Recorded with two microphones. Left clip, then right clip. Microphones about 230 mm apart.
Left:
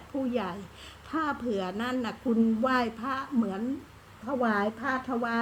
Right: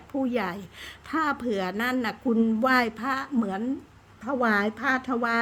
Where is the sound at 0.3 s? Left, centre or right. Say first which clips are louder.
Right 3 dB; right.